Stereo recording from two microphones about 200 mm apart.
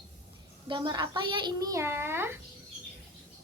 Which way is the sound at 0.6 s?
25° right (ahead or behind).